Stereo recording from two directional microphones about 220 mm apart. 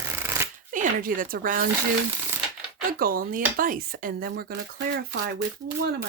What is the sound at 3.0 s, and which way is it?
Speech, 40° right (ahead or behind).